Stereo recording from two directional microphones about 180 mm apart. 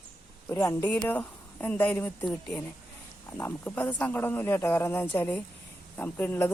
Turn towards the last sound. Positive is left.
turn(degrees=10)  # may be behind; listen again after turning